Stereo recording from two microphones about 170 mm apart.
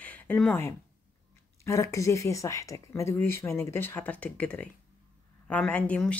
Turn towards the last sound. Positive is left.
turn(degrees=5)  # may be behind; listen again after turning